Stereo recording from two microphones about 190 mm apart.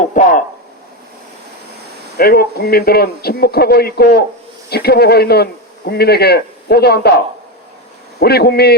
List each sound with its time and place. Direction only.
0.0 s a sound: 40° left (ahead or behind)
2.1 s a man's voice: 55° left (ahead or behind)
8.2 s a man's voice: 55° left (ahead or behind)